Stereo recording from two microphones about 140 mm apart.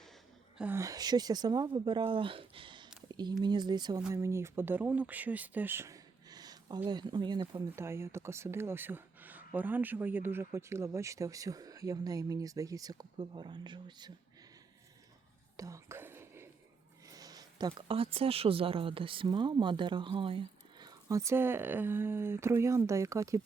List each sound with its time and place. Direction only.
0.6 s speech: 20° right (ahead or behind)
7.8 s speech: 20° right (ahead or behind); by 14.1 s 35° right (ahead or behind)
15.5 s whispering: 25° right (ahead or behind)
17.1 s speech: 25° right (ahead or behind)